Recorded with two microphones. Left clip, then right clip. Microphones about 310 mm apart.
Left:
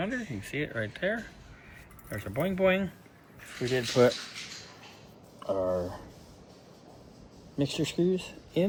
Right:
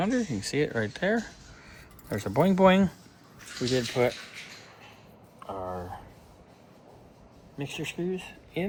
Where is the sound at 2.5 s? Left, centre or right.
Right.